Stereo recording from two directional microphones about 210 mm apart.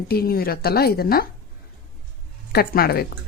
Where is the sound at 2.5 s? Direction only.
45° left (ahead or behind).